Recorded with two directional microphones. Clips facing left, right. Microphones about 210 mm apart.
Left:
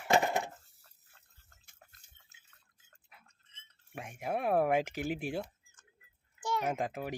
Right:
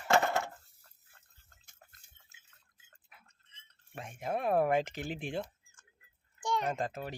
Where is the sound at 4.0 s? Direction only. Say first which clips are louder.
Even; 10° left (ahead or behind).